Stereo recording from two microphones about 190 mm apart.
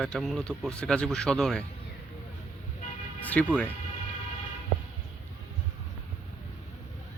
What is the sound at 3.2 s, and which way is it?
Speech, 10° left (ahead or behind).